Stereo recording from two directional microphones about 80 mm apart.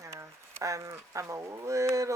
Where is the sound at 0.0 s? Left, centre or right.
Right.